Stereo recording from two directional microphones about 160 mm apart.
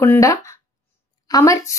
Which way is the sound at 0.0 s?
15° left (ahead or behind).